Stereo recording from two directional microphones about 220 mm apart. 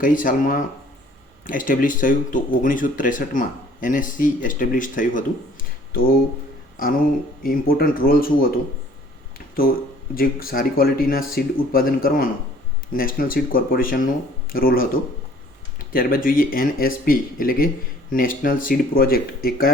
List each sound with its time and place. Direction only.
0.0 s speech: 40° left (ahead or behind)
10.2 s speech: 40° left (ahead or behind)
15.9 s speech: 40° left (ahead or behind)